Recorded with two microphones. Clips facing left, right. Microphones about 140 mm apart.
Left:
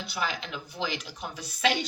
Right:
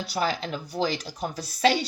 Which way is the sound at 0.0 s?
40° right (ahead or behind).